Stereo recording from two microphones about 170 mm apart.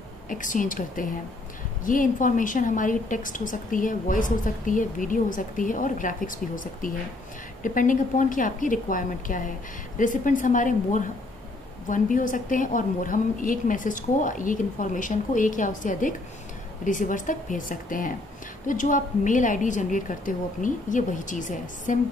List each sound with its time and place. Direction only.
0.3 s a woman's voice: 50° left (ahead or behind)